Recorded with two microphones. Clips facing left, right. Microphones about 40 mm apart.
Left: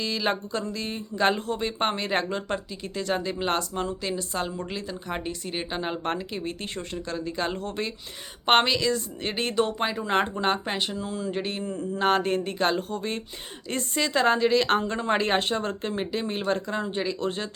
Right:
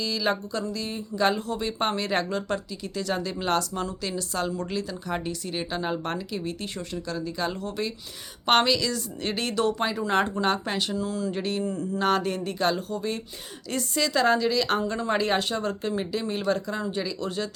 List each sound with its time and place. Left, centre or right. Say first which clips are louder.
0.0 s a woman's voice: even; left